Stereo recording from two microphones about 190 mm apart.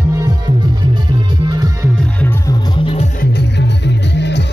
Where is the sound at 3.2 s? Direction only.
60° left (ahead or behind).